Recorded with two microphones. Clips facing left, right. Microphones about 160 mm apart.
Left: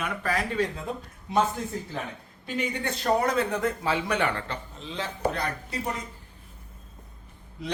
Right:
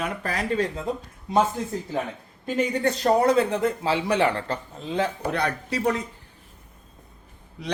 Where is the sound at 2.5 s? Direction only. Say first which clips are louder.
Right 7 dB; 40° right (ahead or behind); by 6.0 s 70° right (ahead or behind).